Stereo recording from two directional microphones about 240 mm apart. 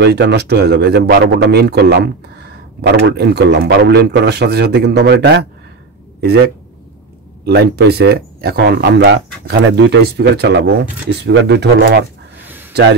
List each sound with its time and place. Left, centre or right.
0.0 s a man's voice: right